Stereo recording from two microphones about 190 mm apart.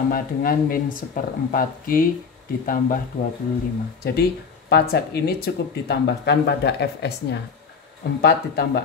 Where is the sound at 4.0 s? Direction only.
55° left (ahead or behind).